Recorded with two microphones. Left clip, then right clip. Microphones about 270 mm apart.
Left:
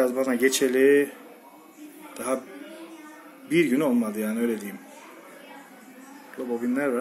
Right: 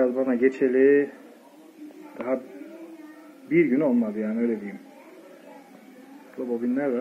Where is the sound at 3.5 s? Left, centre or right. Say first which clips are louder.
Right 1 dB; left.